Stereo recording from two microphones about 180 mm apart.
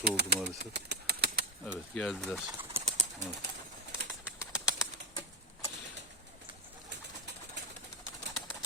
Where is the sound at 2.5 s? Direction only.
35° right (ahead or behind).